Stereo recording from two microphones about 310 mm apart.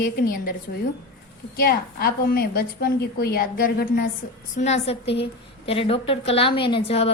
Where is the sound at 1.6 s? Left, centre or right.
Left.